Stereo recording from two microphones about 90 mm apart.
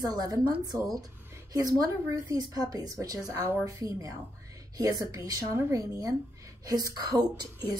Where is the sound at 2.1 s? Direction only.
45° right (ahead or behind).